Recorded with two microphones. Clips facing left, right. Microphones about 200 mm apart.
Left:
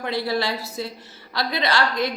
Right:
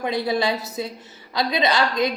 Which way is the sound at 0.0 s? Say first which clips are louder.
Right 2 dB; 20° right (ahead or behind).